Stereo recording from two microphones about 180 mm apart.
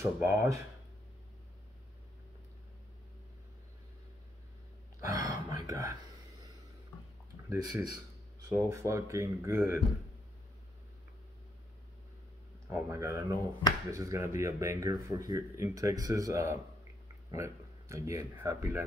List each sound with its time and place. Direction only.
0.0 s speech: 15° right (ahead or behind)
5.0 s speech: 20° right (ahead or behind)
7.4 s speech: 15° right (ahead or behind)
12.7 s speech: 15° right (ahead or behind)